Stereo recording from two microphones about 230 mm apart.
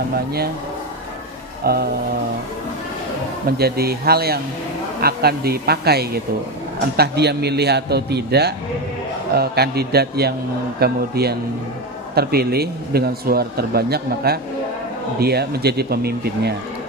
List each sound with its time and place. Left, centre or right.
1.6 s music: right
3.4 s speech: right